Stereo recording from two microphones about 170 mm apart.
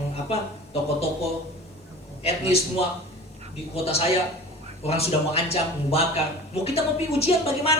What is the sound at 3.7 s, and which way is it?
A woman's voice, 35° left (ahead or behind).